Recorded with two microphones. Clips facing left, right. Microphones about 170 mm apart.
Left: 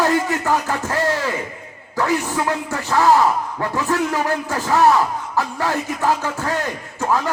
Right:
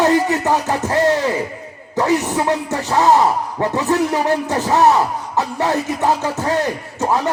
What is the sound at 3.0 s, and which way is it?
Music, 20° right (ahead or behind).